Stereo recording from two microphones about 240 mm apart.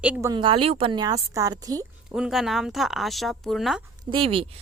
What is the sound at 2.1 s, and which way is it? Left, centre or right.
Speech, centre.